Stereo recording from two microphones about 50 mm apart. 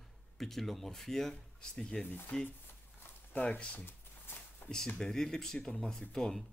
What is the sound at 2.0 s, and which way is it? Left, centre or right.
Speech, left.